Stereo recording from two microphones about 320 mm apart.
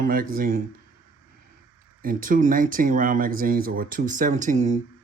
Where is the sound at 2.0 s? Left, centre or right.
Right.